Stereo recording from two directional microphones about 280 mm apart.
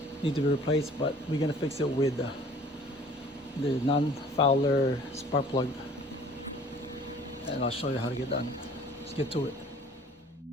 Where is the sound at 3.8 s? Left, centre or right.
Left.